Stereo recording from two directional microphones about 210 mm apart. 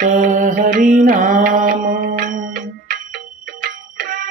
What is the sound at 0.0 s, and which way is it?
Music, 35° right (ahead or behind).